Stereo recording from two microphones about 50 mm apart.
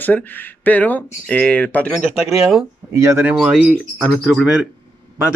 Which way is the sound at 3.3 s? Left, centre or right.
Centre.